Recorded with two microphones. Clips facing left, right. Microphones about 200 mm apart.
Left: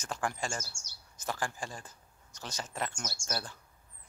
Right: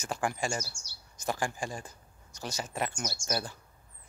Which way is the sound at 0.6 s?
50° left (ahead or behind).